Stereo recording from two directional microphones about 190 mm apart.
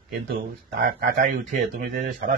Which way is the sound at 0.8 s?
50° right (ahead or behind).